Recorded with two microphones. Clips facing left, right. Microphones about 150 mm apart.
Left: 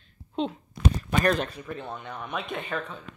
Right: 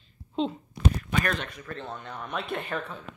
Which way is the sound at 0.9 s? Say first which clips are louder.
Left 5 dB; 35° left (ahead or behind).